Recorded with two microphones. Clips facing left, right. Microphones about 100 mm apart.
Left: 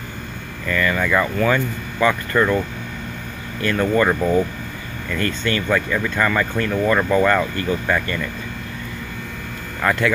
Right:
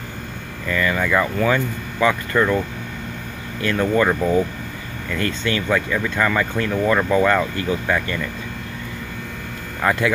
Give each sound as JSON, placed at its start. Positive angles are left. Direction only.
{"t": 0.7, "sound": "speech", "side_deg": -10}
{"t": 3.6, "sound": "speech", "side_deg": -5}
{"t": 9.8, "sound": "speech", "side_deg": -15}